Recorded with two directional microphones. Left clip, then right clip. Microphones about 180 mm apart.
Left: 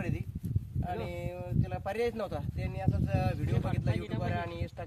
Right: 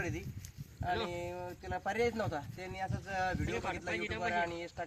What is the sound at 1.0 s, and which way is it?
Speech, 20° left (ahead or behind).